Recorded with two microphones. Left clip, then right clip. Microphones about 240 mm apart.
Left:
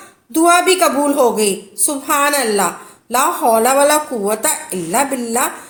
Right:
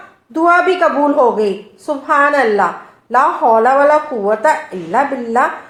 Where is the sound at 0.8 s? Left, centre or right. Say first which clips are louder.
Right 2 dB; left.